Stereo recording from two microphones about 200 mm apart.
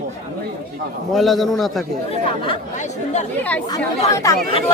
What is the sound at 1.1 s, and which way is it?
Speech, centre (ahead or behind).